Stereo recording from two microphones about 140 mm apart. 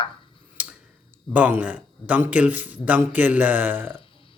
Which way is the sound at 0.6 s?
10° right (ahead or behind).